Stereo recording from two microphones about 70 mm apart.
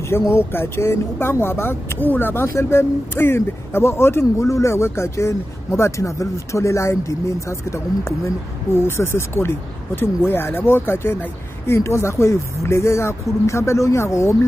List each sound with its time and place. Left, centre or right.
0.3 s speech: left